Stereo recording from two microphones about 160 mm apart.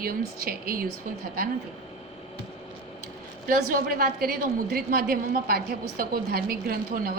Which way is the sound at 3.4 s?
60° right (ahead or behind).